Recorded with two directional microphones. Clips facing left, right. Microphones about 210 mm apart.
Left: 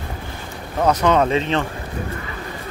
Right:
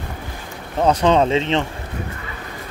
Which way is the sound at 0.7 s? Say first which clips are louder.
Right 1 dB; 25° right (ahead or behind).